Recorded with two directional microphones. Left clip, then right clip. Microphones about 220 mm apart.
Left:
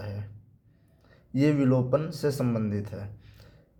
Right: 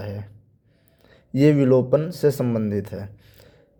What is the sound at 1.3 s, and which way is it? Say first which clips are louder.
Speech: right 8 dB; 35° right (ahead or behind).